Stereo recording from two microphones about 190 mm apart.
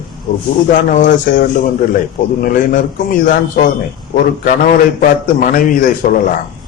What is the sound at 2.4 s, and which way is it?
A man's voice, 45° left (ahead or behind).